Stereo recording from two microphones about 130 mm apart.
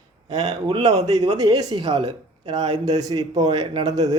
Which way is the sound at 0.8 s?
60° right (ahead or behind).